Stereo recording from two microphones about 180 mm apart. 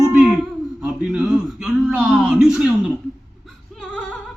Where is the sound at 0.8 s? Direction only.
5° right (ahead or behind).